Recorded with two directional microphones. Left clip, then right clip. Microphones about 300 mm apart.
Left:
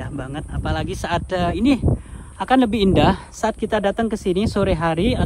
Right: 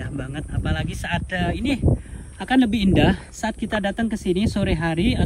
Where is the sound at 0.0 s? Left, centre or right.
Centre.